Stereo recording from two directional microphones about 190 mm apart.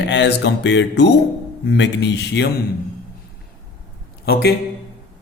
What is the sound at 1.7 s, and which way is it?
Speech, 65° left (ahead or behind).